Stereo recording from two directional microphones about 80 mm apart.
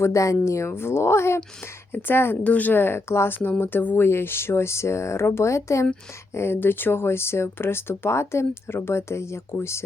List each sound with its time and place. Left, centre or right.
0.0 s speech: left